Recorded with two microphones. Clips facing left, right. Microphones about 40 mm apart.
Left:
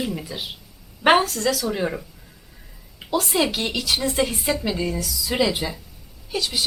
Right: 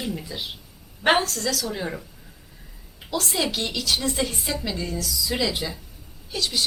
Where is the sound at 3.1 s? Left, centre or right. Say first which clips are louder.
Left 4 dB; centre.